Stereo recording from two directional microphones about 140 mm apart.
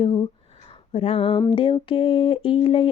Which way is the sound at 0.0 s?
35° left (ahead or behind).